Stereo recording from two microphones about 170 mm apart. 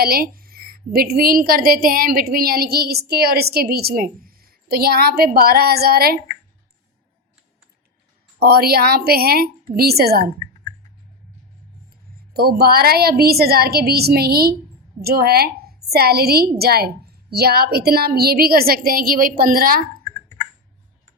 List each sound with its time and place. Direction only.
0.0 s a woman's voice: 60° right (ahead or behind)
8.4 s a woman's voice: 65° right (ahead or behind)
12.3 s a woman's voice: 65° right (ahead or behind)
20.1 s clicking: 20° left (ahead or behind)